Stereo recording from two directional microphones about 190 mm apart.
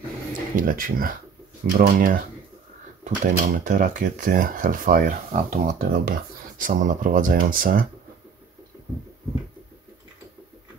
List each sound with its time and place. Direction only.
0.6 s speech: 45° right (ahead or behind)